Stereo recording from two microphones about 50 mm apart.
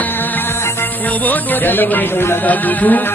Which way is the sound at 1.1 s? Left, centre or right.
Left.